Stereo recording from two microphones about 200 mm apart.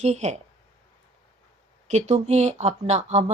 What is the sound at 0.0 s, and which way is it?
Speech, 35° right (ahead or behind).